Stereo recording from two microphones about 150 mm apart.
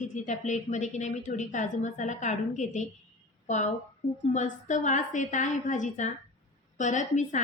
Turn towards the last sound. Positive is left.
turn(degrees=55)  # may be behind; listen again after turning